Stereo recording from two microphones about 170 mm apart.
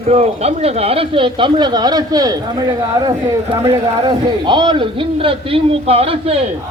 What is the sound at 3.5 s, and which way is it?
A man's voice, 15° right (ahead or behind).